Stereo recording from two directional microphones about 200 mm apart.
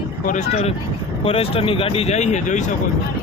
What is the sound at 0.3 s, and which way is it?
Speech, 35° left (ahead or behind).